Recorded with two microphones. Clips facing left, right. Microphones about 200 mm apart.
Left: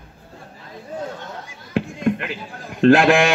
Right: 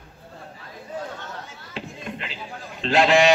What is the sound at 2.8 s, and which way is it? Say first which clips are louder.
Speech: left 5 dB; 55° left (ahead or behind).